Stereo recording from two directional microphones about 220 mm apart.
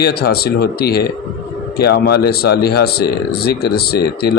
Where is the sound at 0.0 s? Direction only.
45° left (ahead or behind).